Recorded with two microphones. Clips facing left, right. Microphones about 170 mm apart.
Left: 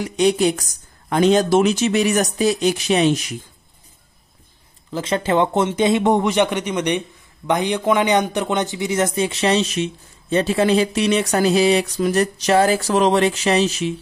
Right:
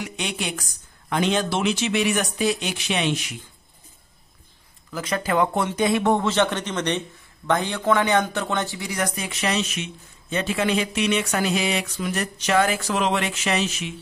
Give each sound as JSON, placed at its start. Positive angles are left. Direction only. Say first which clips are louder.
{"t": 0.0, "sound": "speech", "louder": "left 13 dB", "side_deg": 40}
{"t": 4.9, "sound": "speech", "louder": "left 4 dB", "side_deg": 25}